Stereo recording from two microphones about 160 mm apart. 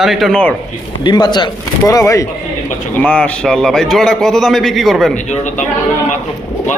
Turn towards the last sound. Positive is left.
turn(degrees=0)  # may be behind; listen again after turning